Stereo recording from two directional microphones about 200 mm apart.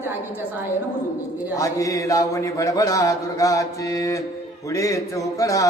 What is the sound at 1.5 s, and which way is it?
Speech, 15° left (ahead or behind).